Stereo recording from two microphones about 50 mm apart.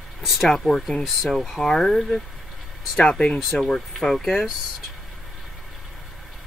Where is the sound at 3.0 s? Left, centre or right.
Centre.